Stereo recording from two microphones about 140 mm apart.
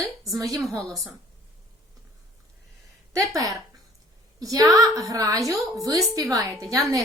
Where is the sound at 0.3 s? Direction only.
25° right (ahead or behind).